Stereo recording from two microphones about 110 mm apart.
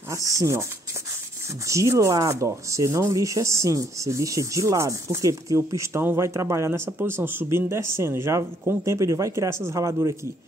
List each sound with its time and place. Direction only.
0.1 s speech: 30° right (ahead or behind)
1.7 s speech: 30° right (ahead or behind)